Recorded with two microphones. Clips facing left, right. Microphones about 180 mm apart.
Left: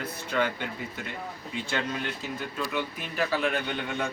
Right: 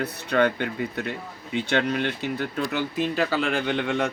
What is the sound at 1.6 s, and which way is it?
Speech, 75° right (ahead or behind).